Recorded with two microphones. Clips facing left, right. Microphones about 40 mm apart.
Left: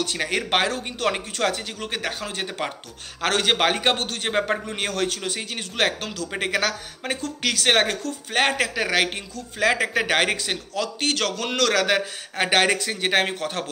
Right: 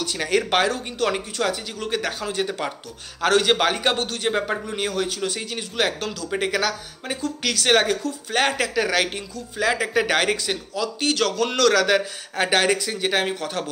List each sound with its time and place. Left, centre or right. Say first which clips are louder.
0.0 s a man's voice: right 2 dB; left
1.4 s a man's voice: left 1 dB; left
5.2 s a man's voice: right 2 dB; left
6.3 s a man's voice: right 1 dB; left
9.9 s a man's voice: right 1 dB; left
10.7 s a man's voice: right 1 dB; left
12.4 s a man's voice: even; left